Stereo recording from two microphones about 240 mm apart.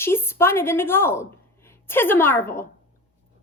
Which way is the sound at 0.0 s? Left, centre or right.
Centre.